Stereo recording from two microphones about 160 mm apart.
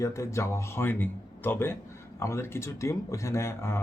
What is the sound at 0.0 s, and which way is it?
Speech, 20° left (ahead or behind).